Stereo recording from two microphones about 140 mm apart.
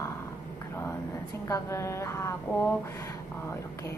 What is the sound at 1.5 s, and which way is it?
Speech, 20° left (ahead or behind).